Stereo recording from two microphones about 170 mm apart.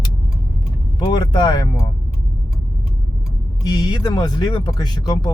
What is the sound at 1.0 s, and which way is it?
Speech, 25° left (ahead or behind).